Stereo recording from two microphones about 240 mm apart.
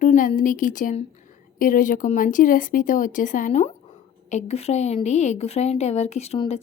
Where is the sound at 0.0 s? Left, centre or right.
Left.